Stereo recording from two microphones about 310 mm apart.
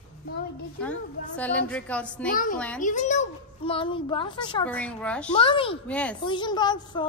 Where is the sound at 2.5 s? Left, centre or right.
Centre.